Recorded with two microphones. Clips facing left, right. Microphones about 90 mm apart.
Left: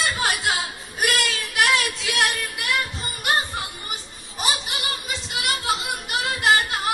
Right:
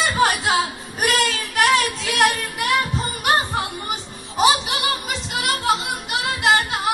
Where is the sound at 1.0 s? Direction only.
35° right (ahead or behind).